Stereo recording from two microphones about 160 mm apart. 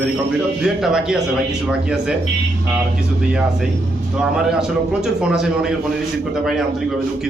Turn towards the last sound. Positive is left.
turn(degrees=-5)  # may be behind; listen again after turning